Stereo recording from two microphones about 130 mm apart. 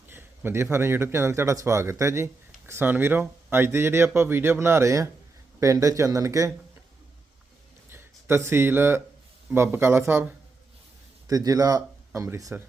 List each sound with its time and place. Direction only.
0.1 s a man's voice: 15° right (ahead or behind)
7.9 s a sound: 20° right (ahead or behind)
9.6 s speech: 20° right (ahead or behind)
11.3 s speech: 30° right (ahead or behind)